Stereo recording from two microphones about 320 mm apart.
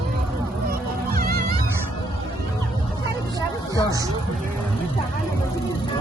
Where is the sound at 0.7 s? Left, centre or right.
Right.